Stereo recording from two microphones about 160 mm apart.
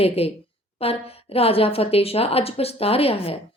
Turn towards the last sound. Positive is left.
turn(degrees=40)  # may be behind; listen again after turning